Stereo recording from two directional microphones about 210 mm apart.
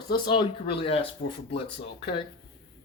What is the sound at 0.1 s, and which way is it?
Speech, 25° left (ahead or behind).